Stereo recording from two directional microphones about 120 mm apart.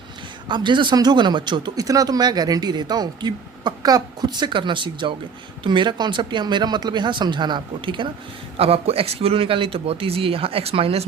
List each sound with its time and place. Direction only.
0.4 s speech: 40° right (ahead or behind)
8.5 s speech: 55° right (ahead or behind)